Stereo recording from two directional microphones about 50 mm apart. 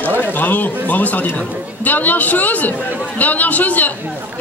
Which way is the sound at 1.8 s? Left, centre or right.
Left.